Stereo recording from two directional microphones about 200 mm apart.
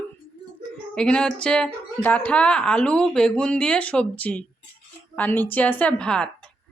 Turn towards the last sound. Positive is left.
turn(degrees=5)  # may be behind; listen again after turning